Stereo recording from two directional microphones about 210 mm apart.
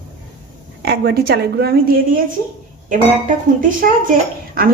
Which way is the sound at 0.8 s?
50° right (ahead or behind).